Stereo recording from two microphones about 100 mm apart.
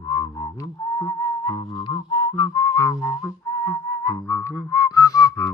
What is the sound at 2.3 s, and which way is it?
Whistling, 40° left (ahead or behind).